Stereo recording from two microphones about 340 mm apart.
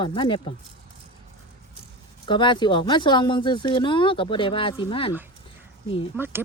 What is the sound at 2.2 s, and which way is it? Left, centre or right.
Speech, centre.